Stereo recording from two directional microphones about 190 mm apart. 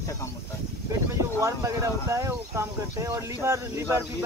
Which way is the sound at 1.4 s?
15° right (ahead or behind).